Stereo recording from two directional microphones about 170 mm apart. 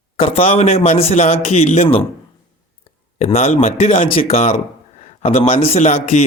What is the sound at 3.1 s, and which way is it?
Speech, 40° left (ahead or behind).